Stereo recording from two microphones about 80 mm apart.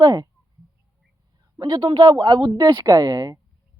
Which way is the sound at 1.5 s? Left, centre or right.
Right.